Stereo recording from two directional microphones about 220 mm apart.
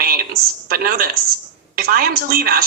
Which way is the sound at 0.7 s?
40° right (ahead or behind).